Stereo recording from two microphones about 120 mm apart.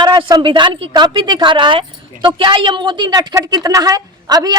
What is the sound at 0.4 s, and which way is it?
A woman's voice, 45° right (ahead or behind).